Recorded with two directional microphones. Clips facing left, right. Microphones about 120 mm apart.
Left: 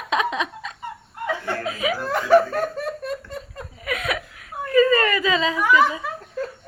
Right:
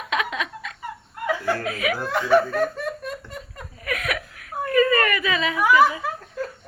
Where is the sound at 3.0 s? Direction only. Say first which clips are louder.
Left 4 dB; 35° left (ahead or behind).